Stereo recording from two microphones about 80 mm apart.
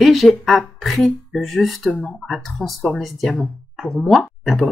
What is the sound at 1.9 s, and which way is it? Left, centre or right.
Speech, centre.